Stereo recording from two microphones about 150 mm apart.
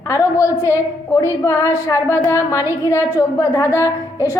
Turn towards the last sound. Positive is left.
turn(degrees=20)  # may be behind; listen again after turning